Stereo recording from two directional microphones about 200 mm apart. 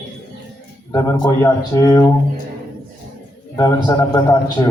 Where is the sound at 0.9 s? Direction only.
20° left (ahead or behind).